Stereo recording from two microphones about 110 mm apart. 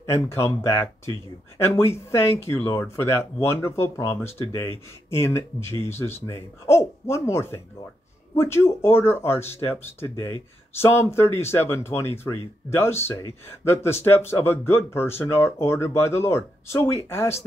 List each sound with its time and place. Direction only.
0.0 s speech: 25° left (ahead or behind)